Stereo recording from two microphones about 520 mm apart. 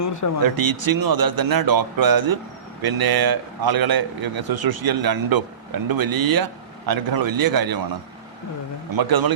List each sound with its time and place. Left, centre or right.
0.0 s speech: left
0.4 s a man's voice: right
9.0 s a man's voice: right